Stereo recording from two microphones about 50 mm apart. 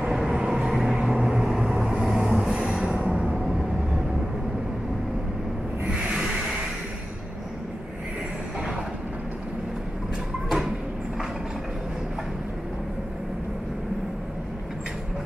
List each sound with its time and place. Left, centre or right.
0.0 s vehicle: centre
2.6 s music: centre
5.9 s a sound: centre